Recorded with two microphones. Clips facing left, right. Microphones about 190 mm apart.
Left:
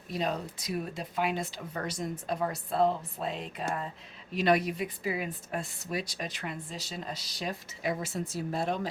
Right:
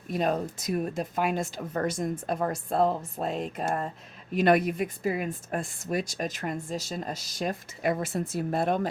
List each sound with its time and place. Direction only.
0.1 s a woman's voice: 50° right (ahead or behind)